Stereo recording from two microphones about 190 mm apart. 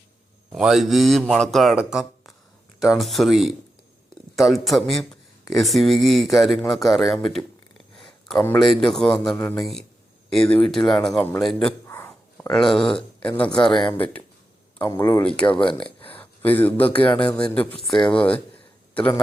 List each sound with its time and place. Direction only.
0.5 s a man's voice: centre (ahead or behind)
11.9 s a sound: 15° left (ahead or behind)
12.5 s a man's voice: centre (ahead or behind)
15.6 s speech: 25° left (ahead or behind)
16.0 s a man's voice: 10° left (ahead or behind)